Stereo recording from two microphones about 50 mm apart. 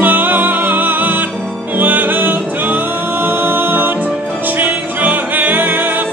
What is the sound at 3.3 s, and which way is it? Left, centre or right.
A capella, right.